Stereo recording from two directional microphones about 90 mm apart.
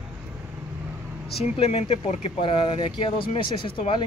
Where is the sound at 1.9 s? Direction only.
80° left.